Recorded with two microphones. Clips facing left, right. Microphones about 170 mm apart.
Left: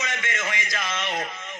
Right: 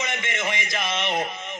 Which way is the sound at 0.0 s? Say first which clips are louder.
Right 2 dB; 20° right (ahead or behind).